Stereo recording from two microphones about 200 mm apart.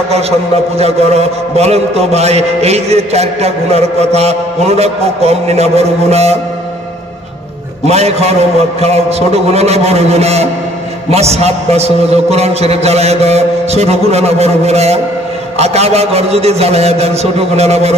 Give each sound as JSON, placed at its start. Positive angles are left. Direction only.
{"t": 0.7, "sound": "a man's voice", "side_deg": -30}
{"t": 7.8, "sound": "a man's voice", "side_deg": -30}